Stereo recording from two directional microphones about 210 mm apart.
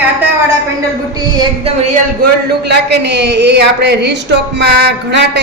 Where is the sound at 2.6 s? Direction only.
50° right (ahead or behind).